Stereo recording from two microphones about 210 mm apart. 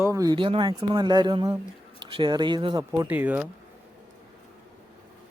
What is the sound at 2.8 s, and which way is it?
Speech, 10° right (ahead or behind).